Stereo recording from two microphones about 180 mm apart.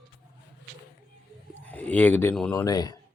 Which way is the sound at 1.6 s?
10° left (ahead or behind).